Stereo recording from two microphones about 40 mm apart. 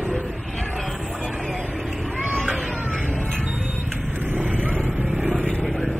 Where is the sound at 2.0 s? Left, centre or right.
Right.